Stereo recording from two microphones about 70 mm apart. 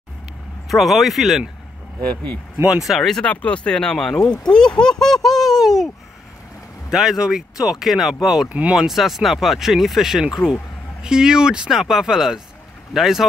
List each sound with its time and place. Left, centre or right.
0.7 s speech: centre
2.8 s speech: centre
3.3 s speech: centre
6.9 s speech: centre
8.8 s speech: centre